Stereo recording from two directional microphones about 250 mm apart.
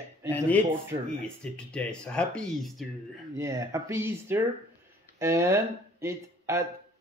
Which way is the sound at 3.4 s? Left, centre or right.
Centre.